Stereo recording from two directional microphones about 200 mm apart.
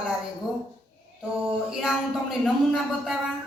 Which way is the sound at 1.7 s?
5° right (ahead or behind).